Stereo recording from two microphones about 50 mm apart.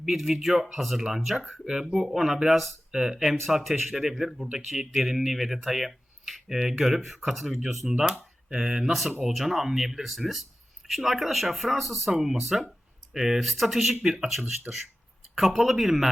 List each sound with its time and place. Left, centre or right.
0.0 s speech: centre
14.7 s speech: right
15.4 s speech: centre